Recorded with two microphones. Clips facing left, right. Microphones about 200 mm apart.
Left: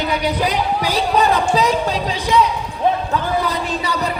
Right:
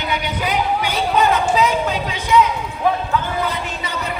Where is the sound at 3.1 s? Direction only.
35° left (ahead or behind).